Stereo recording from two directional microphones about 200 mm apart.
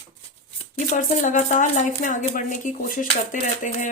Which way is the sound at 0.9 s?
40° left (ahead or behind).